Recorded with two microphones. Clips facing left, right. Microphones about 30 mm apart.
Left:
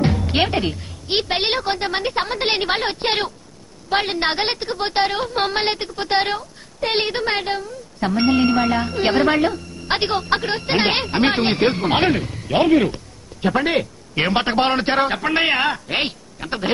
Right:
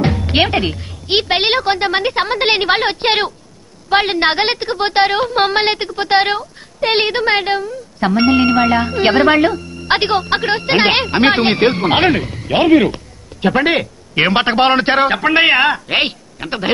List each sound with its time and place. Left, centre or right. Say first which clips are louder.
0.3 s a woman's voice: right 5 dB; right